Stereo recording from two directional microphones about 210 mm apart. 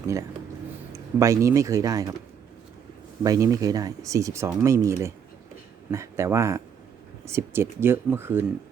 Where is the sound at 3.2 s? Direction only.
15° right (ahead or behind).